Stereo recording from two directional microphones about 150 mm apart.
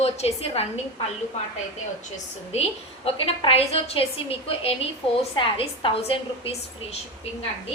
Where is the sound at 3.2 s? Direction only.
40° left (ahead or behind).